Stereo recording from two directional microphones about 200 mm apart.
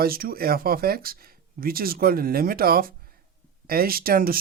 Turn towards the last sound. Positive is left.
turn(degrees=-45)  # may be behind; listen again after turning